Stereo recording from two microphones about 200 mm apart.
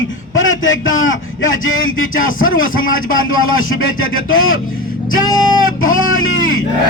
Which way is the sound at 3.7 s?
90° left.